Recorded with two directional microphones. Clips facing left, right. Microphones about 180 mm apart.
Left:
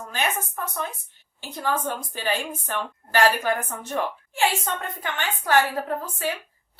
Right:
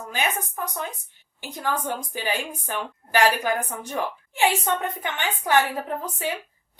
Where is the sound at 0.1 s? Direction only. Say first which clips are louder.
Even; 15° right (ahead or behind).